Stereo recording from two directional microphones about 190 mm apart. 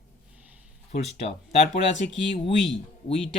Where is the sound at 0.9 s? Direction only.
35° left (ahead or behind).